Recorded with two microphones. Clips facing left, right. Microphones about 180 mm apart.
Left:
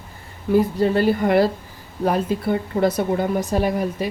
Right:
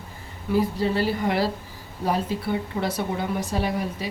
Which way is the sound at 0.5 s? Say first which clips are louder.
Left 5 dB; 50° left (ahead or behind).